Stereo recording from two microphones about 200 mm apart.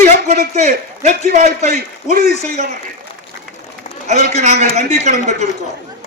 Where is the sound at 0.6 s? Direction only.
35° right (ahead or behind).